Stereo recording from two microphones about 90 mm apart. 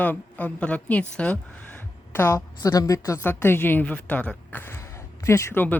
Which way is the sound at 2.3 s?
40° left (ahead or behind).